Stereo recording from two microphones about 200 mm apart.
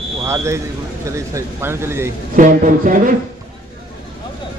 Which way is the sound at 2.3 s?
40° right (ahead or behind).